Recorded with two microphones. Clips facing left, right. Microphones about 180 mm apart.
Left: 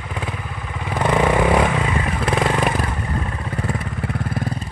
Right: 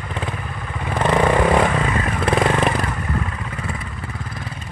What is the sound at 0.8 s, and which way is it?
Vehicle, 10° left (ahead or behind).